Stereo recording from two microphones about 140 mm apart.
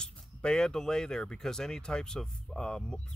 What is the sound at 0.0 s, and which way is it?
Speech, 5° left (ahead or behind).